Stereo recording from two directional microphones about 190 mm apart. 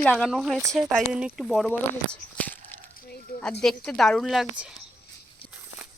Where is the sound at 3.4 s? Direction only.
5° left (ahead or behind).